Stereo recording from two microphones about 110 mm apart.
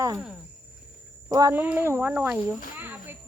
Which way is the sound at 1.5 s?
15° right (ahead or behind).